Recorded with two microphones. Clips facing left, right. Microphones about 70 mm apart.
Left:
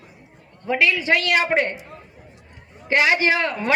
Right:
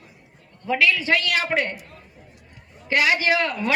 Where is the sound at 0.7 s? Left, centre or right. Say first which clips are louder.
Left 1 dB; left.